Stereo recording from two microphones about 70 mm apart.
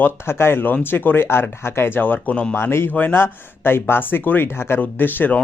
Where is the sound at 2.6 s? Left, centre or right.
Left.